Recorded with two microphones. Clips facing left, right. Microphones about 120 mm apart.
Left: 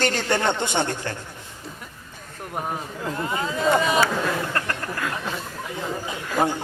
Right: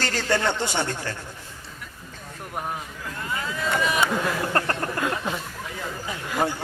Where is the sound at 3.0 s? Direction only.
25° left (ahead or behind).